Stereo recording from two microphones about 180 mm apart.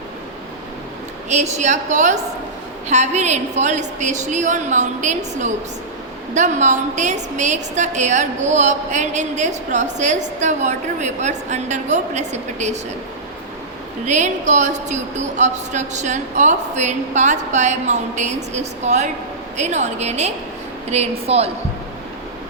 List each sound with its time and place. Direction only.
1.3 s a woman's voice: 40° right (ahead or behind)
14.1 s a woman's voice: 40° right (ahead or behind)